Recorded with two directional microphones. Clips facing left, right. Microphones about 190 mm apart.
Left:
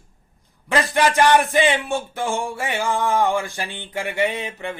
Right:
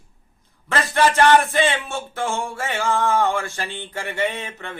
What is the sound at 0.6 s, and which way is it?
Speech, 15° left (ahead or behind).